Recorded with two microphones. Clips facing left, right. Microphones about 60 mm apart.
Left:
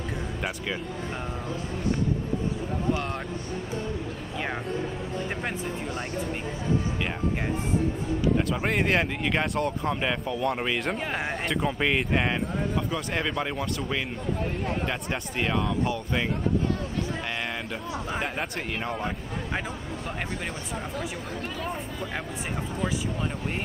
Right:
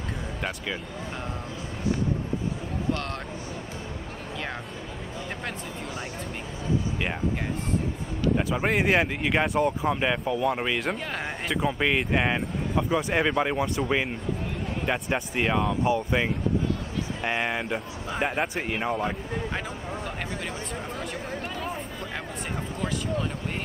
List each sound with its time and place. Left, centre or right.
8.4 s speech: centre
12.7 s speech: centre